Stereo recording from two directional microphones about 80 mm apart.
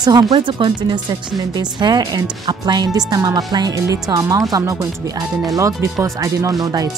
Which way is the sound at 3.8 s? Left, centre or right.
Right.